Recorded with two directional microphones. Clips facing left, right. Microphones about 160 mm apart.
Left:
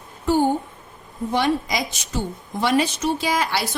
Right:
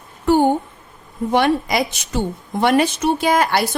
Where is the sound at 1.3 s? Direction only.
60° right (ahead or behind).